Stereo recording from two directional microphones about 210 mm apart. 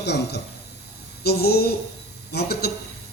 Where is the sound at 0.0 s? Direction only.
50° left (ahead or behind).